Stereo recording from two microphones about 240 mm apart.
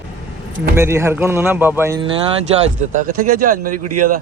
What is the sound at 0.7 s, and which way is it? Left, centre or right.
Speech, centre.